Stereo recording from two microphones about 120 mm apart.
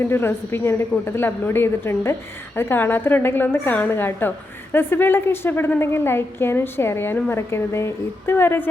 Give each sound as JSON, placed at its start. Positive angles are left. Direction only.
{"t": 0.0, "sound": "a woman's voice", "side_deg": 20}